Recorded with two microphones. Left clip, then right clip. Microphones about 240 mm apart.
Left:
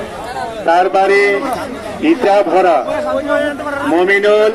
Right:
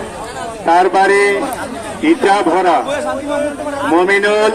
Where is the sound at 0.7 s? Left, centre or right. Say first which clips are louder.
Even; right.